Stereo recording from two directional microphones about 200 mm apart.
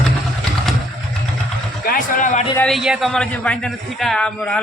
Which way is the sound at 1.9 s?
40° left (ahead or behind).